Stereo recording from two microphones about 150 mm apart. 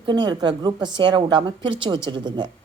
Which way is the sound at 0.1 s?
30° right (ahead or behind).